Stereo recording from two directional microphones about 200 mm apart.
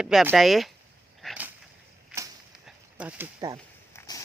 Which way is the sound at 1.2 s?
5° right (ahead or behind).